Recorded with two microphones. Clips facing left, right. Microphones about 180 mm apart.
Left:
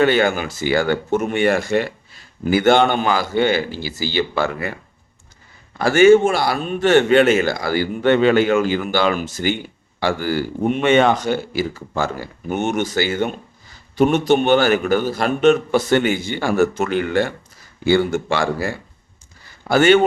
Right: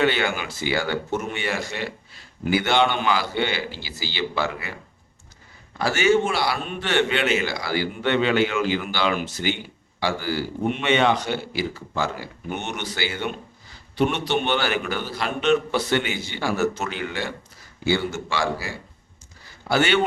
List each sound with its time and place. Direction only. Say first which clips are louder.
0.0 s a man's voice: left 6 dB; 45° left (ahead or behind)
5.8 s a man's voice: left 9 dB; 50° left (ahead or behind)